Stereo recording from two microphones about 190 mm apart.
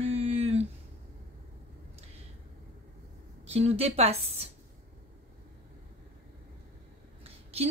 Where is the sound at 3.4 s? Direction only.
35° right (ahead or behind).